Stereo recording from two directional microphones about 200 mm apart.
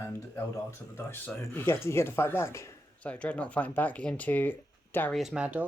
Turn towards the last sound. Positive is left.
turn(degrees=-5)  # may be behind; listen again after turning